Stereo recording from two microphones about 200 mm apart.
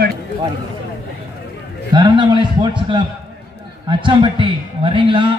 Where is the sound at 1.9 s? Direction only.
20° right (ahead or behind).